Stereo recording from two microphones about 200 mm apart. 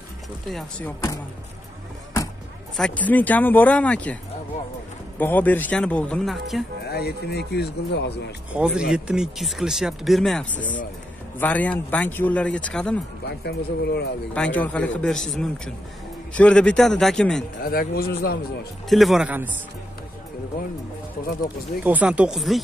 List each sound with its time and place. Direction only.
0.5 s speech: 5° left (ahead or behind)
2.8 s speech: 5° left (ahead or behind)
5.2 s speech: 10° left (ahead or behind)
6.9 s speech: 50° left (ahead or behind)
8.5 s speech: 5° right (ahead or behind)
13.3 s speech: 55° left (ahead or behind)
14.3 s speech: 5° left (ahead or behind)
17.6 s a man's voice: 50° left (ahead or behind)
18.9 s speech: centre (ahead or behind)
21.8 s speech: 5° right (ahead or behind)